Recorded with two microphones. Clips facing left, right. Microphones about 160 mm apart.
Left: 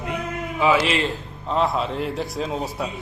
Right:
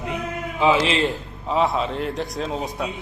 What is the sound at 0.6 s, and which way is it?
Speech, 20° right (ahead or behind).